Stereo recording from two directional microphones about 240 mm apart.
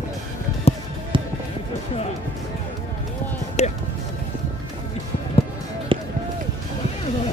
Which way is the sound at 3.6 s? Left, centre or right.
Left.